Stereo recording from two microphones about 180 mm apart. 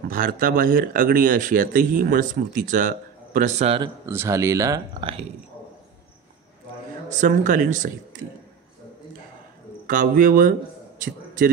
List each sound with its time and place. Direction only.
0.1 s speech: 50° right (ahead or behind); by 3.9 s 30° right (ahead or behind)
4.0 s speech: 15° right (ahead or behind)
7.1 s speech: 45° right (ahead or behind)
9.8 s a man's voice: 50° right (ahead or behind)